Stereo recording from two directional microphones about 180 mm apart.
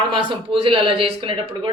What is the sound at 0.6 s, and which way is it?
Speech, 30° right (ahead or behind).